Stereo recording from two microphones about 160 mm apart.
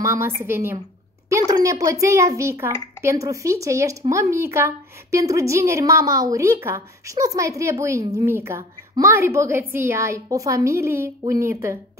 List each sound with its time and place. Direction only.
0.0 s a child's voice: 20° right (ahead or behind)